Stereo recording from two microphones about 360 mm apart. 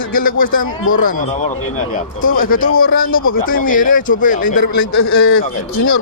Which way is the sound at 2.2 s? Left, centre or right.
Left.